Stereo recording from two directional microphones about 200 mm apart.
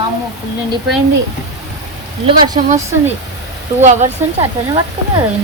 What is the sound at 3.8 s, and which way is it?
Speech, 35° right (ahead or behind).